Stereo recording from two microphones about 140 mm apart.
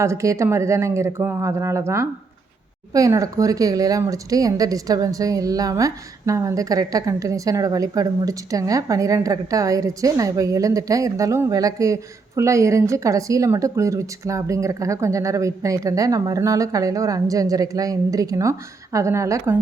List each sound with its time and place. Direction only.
0.0 s speech: 20° right (ahead or behind)